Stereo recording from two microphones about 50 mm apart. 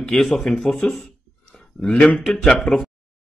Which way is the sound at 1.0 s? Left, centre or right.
Centre.